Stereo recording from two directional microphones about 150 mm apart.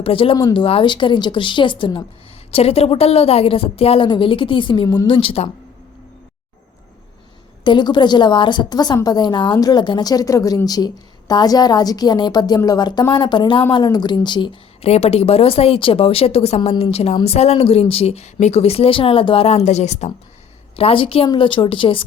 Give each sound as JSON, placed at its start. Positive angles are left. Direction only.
{"t": 0.0, "sound": "a woman's voice", "side_deg": 40}
{"t": 7.6, "sound": "a woman's voice", "side_deg": 30}
{"t": 20.7, "sound": "a woman's voice", "side_deg": 40}